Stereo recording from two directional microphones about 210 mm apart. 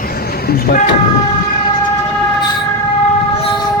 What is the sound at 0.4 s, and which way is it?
Speech, 45° left (ahead or behind).